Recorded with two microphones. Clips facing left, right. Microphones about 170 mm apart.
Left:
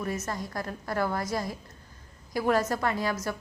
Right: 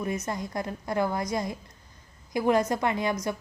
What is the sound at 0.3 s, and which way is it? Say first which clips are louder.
A woman's voice: right 2 dB; 20° right (ahead or behind).